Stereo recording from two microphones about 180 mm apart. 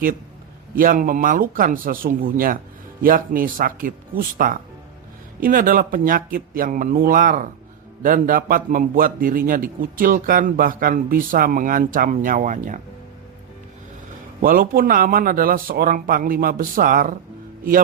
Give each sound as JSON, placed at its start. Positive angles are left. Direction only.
{"t": 0.8, "sound": "a man's voice", "side_deg": -50}
{"t": 14.4, "sound": "a man's voice", "side_deg": -55}